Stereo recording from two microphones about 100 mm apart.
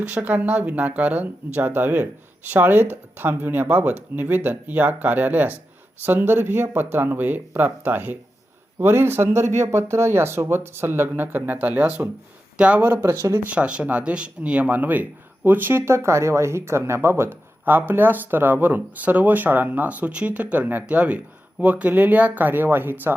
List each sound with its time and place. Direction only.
0.0 s speech: 15° right (ahead or behind)
13.5 s speech: 10° right (ahead or behind)